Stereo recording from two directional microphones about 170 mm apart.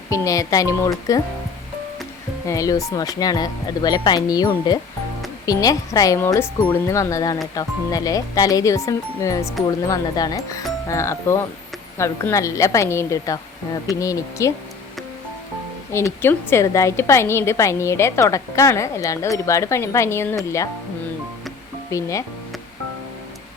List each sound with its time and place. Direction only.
0.1 s speech: 20° left (ahead or behind)
2.5 s a woman's voice: 20° left (ahead or behind)
15.9 s a woman's voice: 15° left (ahead or behind)
21.8 s speech: 20° left (ahead or behind)